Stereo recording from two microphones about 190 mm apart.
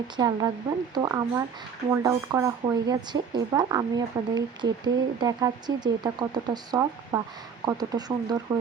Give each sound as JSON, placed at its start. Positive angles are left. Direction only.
{"t": 0.2, "sound": "speech", "side_deg": -20}